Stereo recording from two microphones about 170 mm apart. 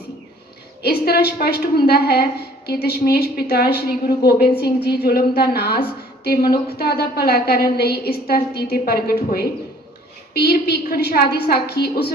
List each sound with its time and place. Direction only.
0.8 s a woman's voice: 65° left (ahead or behind)